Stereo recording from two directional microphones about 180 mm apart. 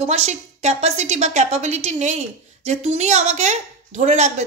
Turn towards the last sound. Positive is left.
turn(degrees=-40)  # may be behind; listen again after turning